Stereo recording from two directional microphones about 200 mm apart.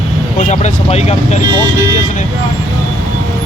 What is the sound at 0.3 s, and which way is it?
Speech, 35° left (ahead or behind).